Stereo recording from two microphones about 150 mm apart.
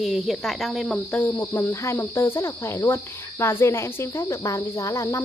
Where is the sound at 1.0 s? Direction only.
10° left (ahead or behind).